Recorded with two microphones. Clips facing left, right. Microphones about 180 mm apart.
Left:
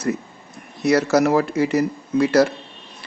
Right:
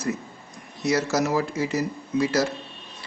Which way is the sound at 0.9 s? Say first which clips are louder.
Left 6 dB; 60° left (ahead or behind).